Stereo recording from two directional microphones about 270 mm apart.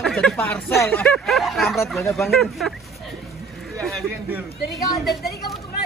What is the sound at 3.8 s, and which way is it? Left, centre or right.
Speech, centre.